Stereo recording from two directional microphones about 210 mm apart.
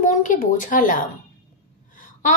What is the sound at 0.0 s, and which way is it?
A woman's voice, 40° left (ahead or behind).